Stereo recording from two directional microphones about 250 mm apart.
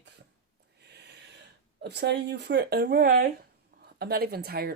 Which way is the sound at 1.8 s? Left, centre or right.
Right.